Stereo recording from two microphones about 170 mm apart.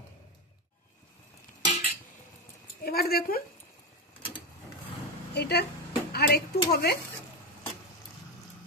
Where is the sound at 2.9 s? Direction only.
65° left (ahead or behind).